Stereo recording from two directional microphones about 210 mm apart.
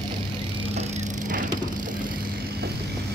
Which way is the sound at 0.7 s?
35° right (ahead or behind).